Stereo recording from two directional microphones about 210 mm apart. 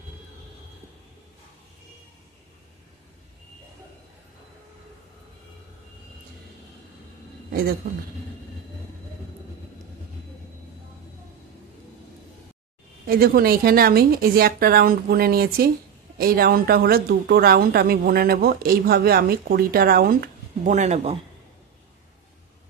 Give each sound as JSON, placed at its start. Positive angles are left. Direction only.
{"t": 13.0, "sound": "a woman's voice", "side_deg": -45}